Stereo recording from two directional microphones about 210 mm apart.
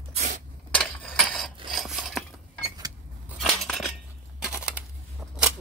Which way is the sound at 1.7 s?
Centre (ahead or behind).